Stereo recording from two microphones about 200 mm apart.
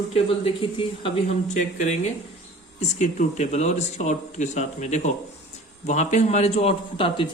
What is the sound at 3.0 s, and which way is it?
Speech, 35° left (ahead or behind).